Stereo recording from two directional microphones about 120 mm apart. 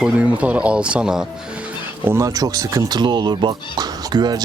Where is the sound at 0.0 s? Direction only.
10° right (ahead or behind).